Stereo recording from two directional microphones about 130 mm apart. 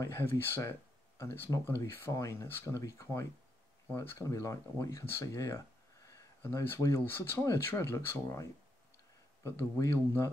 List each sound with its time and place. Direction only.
0.0 s speech: 20° left (ahead or behind)